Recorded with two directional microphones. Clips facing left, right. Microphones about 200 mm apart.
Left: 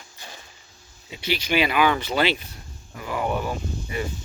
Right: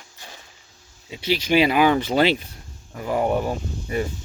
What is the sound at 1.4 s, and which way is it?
Speech, 35° right (ahead or behind).